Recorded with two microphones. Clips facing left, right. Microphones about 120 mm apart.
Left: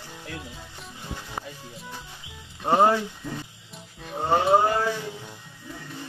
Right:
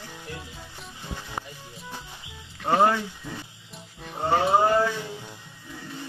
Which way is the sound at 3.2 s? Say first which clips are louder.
Left 3 dB; centre (ahead or behind).